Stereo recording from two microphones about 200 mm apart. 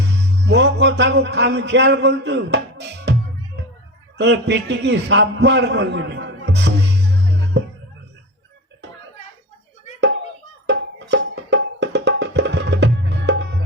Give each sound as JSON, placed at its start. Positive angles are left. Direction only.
{"t": 0.2, "sound": "music", "side_deg": -60}
{"t": 4.2, "sound": "a man's voice", "side_deg": -60}
{"t": 10.7, "sound": "music", "side_deg": -60}